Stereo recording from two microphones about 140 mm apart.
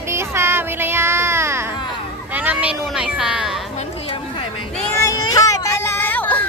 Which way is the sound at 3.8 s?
40° left (ahead or behind).